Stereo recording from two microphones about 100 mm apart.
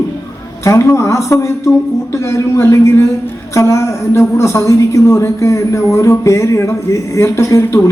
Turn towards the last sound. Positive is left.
turn(degrees=30)  # may be behind; listen again after turning